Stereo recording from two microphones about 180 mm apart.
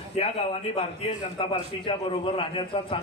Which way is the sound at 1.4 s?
30° left (ahead or behind).